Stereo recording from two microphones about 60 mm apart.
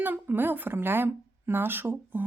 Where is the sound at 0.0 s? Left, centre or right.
Right.